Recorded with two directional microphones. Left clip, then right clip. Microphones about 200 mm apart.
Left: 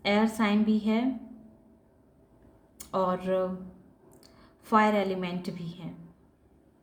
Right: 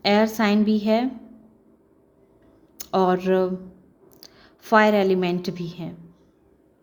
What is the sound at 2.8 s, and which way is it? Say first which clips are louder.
A woman's voice: right 8 dB; 45° right (ahead or behind).